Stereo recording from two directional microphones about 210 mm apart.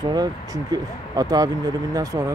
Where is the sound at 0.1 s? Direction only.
20° right (ahead or behind).